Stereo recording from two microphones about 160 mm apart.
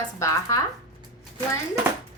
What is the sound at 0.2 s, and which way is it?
Speech, 20° left (ahead or behind).